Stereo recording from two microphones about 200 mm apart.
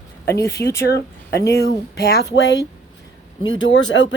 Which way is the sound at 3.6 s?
65° left (ahead or behind).